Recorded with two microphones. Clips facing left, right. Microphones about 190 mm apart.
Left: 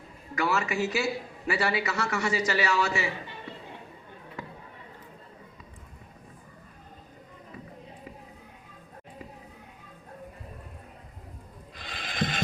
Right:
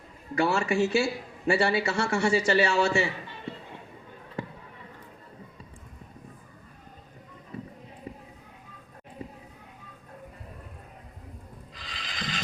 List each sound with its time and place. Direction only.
0.3 s speech: 30° right (ahead or behind)
4.4 s basketball bounce: 30° right (ahead or behind)
11.7 s a sound: 55° left (ahead or behind)